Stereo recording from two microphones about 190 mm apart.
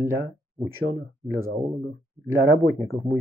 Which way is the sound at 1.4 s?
15° right (ahead or behind).